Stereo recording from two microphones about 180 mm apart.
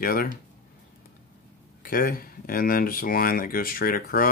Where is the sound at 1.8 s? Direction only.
55° left (ahead or behind).